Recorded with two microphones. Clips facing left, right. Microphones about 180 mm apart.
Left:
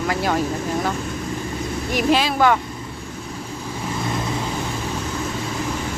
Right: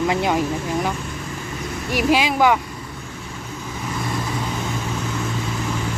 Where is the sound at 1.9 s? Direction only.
10° right (ahead or behind).